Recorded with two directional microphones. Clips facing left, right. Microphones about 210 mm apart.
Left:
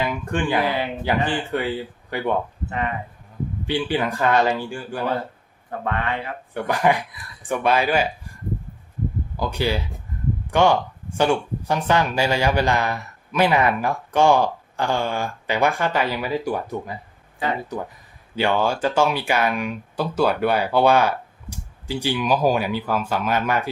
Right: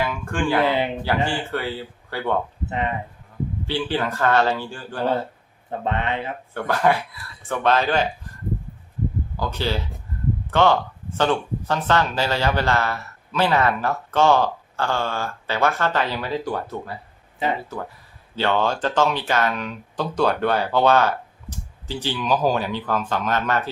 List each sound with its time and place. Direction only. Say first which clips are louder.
0.0 s speech: even; 20° left (ahead or behind)
2.6 s speech: right 2 dB; 20° right (ahead or behind)
3.7 s speech: left 2 dB; 15° left (ahead or behind)
5.8 s speech: right 1 dB; 20° right (ahead or behind)
6.5 s speech: even; 15° left (ahead or behind)
9.4 s speech: left 2 dB; 15° left (ahead or behind)
18.3 s speech: left 1 dB; 10° left (ahead or behind)